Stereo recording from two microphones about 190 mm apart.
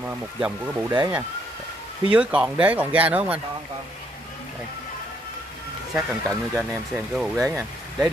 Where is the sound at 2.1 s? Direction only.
5° right (ahead or behind).